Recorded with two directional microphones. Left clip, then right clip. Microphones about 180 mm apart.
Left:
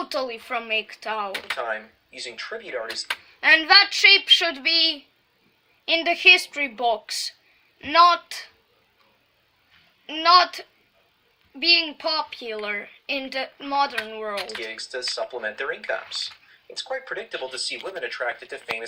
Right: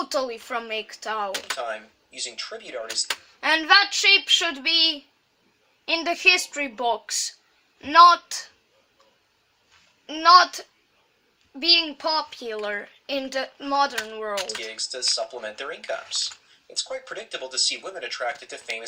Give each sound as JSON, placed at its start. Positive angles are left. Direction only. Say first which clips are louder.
{"t": 0.0, "sound": "a woman's voice", "louder": "right 1 dB", "side_deg": -10}
{"t": 1.5, "sound": "speech", "louder": "left 2 dB", "side_deg": 30}
{"t": 3.1, "sound": "a woman's voice", "louder": "left 6 dB", "side_deg": -15}
{"t": 6.1, "sound": "a woman's voice", "louder": "left 4 dB", "side_deg": -15}
{"t": 10.1, "sound": "a woman's voice", "louder": "right 2 dB", "side_deg": -15}
{"t": 14.3, "sound": "speech", "louder": "right 4 dB", "side_deg": -25}
{"t": 14.6, "sound": "speech", "louder": "right 2 dB", "side_deg": 25}